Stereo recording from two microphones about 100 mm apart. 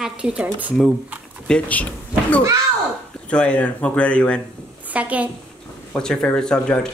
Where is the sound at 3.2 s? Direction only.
10° left (ahead or behind).